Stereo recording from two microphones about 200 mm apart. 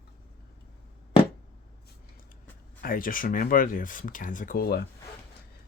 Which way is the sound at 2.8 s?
45° left (ahead or behind).